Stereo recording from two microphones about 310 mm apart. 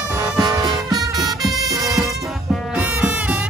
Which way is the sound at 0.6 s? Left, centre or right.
Centre.